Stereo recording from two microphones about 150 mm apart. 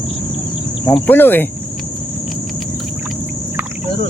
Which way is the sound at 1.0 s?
15° left (ahead or behind).